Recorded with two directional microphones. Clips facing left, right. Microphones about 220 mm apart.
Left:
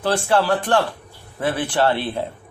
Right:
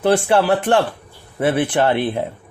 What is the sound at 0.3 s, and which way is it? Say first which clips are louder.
Speech: right 3 dB; 20° right (ahead or behind).